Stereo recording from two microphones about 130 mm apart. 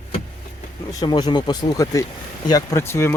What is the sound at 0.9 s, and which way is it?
Speech, 30° left (ahead or behind).